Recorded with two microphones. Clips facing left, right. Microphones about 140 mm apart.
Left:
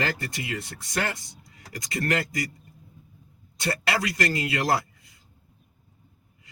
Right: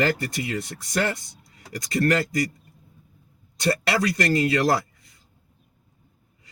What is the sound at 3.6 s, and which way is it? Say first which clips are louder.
Speech: right 4 dB; 35° right (ahead or behind).